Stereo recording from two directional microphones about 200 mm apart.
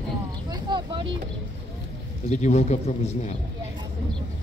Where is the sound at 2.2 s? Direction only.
35° left (ahead or behind).